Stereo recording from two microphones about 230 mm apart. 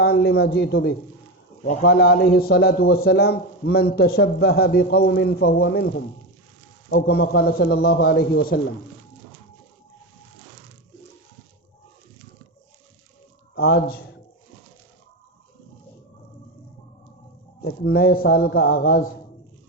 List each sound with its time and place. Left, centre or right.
0.0 s a man's voice: left
17.6 s a man's voice: left